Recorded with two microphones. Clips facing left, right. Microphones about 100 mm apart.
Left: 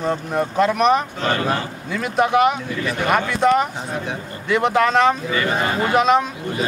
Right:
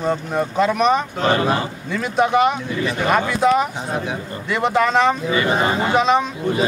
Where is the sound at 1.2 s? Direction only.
10° right (ahead or behind).